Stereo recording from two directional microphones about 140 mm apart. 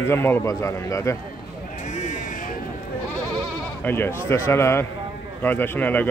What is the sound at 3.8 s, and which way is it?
Speech, 15° left (ahead or behind).